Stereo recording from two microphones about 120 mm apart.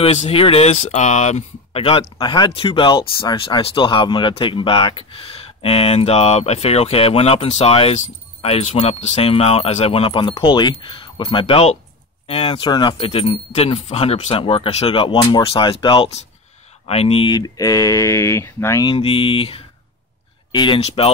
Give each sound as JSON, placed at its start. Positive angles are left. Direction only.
{"t": 0.0, "sound": "speech", "side_deg": 60}
{"t": 2.1, "sound": "speech", "side_deg": 40}
{"t": 12.3, "sound": "speech", "side_deg": 50}
{"t": 17.4, "sound": "speech", "side_deg": 30}
{"t": 18.9, "sound": "speech", "side_deg": 50}